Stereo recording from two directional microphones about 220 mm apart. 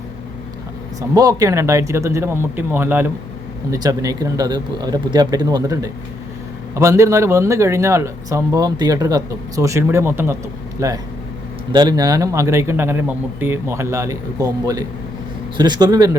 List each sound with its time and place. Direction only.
1.1 s speech: 15° right (ahead or behind)